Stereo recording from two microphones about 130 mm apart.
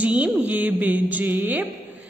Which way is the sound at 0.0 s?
10° right (ahead or behind).